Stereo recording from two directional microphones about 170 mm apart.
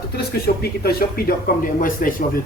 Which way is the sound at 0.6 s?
65° left (ahead or behind).